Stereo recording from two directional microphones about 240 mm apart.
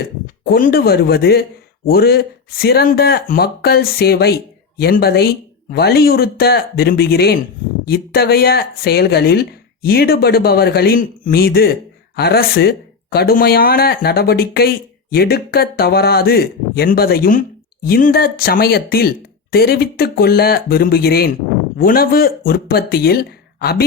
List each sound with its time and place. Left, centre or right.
0.4 s speech: left